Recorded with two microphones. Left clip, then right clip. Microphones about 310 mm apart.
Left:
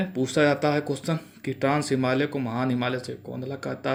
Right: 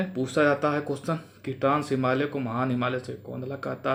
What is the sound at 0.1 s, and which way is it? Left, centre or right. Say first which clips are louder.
Speech: left 1 dB; centre.